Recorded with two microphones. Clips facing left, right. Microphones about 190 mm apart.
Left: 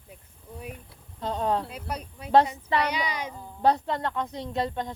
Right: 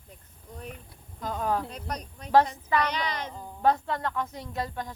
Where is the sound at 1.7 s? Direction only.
5° left (ahead or behind).